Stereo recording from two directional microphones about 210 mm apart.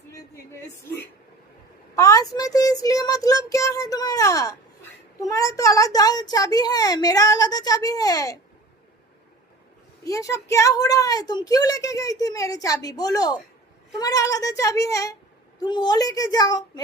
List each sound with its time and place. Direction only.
2.0 s a woman's voice: 15° left (ahead or behind)
10.0 s a woman's voice: 15° left (ahead or behind)